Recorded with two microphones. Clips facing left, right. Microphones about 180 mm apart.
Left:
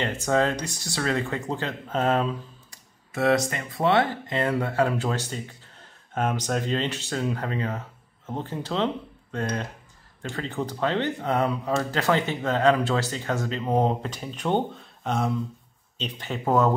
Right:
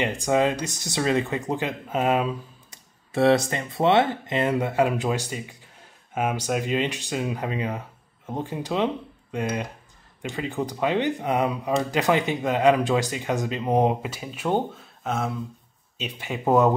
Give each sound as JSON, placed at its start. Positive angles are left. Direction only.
{"t": 0.0, "sound": "speech", "side_deg": -15}
{"t": 3.1, "sound": "speech", "side_deg": -30}